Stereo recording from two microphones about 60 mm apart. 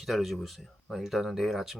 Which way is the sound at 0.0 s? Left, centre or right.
Centre.